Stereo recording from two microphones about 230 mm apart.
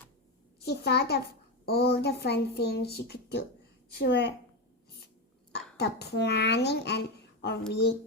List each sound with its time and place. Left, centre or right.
0.6 s speech: left
5.7 s speech: left